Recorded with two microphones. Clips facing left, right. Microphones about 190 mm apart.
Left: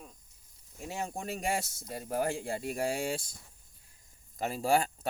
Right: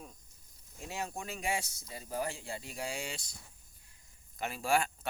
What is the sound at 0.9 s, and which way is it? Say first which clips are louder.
Speech: left 3 dB; 25° left (ahead or behind).